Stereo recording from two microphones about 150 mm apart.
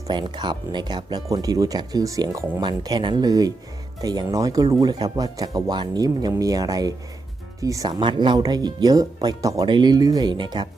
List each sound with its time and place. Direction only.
0.1 s speech: 30° right (ahead or behind)